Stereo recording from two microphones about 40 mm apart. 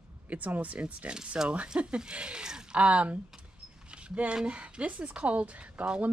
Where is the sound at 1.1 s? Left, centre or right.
Right.